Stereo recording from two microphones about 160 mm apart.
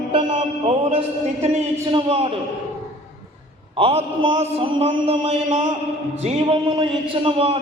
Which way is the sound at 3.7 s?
35° right (ahead or behind).